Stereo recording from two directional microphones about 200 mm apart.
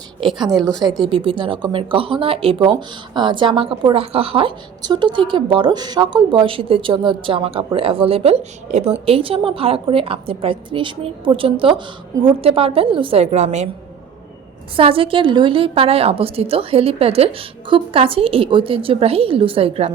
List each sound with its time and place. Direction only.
0.5 s a woman's voice: 5° left (ahead or behind)
1.2 s a woman's voice: 25° right (ahead or behind)
14.8 s a woman's voice: 25° right (ahead or behind)